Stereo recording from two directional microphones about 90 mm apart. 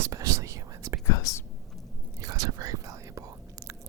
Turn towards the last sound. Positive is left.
turn(degrees=-40)  # may be behind; listen again after turning